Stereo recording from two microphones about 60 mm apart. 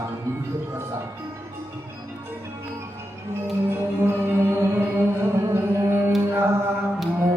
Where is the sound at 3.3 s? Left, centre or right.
Right.